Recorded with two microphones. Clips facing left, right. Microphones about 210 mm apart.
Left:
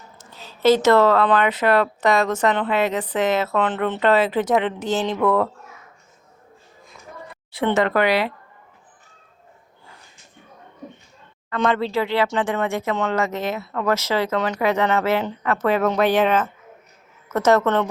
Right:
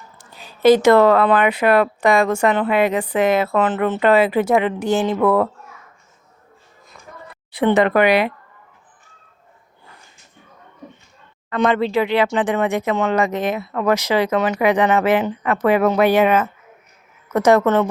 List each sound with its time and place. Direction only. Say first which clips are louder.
0.2 s speech: right 4 dB; 15° right (ahead or behind)
7.5 s speech: right 4 dB; 15° right (ahead or behind)
11.4 s a woman's voice: right 3 dB; 15° right (ahead or behind)